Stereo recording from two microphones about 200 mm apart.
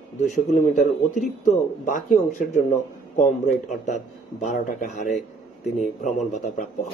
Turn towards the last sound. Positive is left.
turn(degrees=35)  # may be behind; listen again after turning